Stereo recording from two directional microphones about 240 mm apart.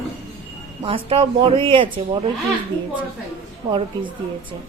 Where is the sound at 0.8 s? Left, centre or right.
Right.